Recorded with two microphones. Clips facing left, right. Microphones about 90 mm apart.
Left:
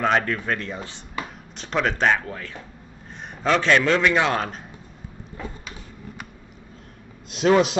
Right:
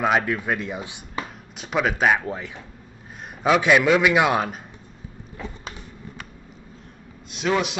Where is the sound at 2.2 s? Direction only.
20° right (ahead or behind).